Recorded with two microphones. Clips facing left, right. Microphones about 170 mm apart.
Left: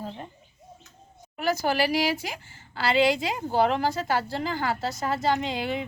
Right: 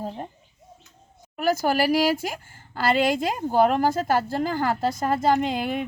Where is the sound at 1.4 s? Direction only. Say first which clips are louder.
Right 3 dB; 50° right (ahead or behind).